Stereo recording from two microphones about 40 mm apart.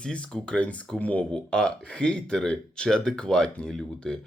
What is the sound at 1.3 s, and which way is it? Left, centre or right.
Speech, centre.